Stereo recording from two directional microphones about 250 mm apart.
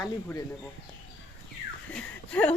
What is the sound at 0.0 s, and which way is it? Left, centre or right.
Speech, centre.